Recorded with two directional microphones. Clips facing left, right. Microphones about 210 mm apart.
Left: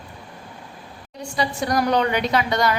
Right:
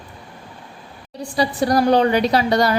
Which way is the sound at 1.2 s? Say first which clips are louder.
Right 5 dB; 35° right (ahead or behind).